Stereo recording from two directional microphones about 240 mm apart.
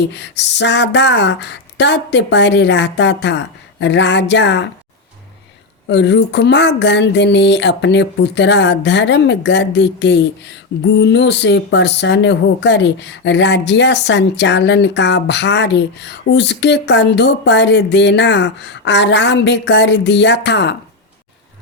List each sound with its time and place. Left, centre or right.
0.1 s speech: left
5.9 s speech: left